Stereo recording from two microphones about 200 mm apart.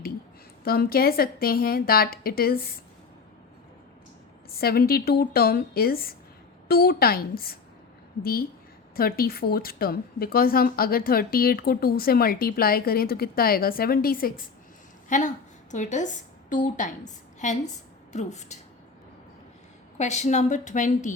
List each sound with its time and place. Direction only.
0.6 s a woman's voice: 50° left (ahead or behind)
4.5 s a woman's voice: 50° left (ahead or behind)
20.0 s a woman's voice: 35° left (ahead or behind)